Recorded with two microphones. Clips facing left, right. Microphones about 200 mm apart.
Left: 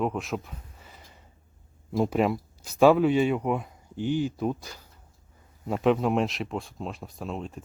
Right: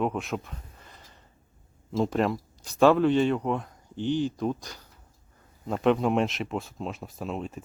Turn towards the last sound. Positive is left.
turn(degrees=0)  # may be behind; listen again after turning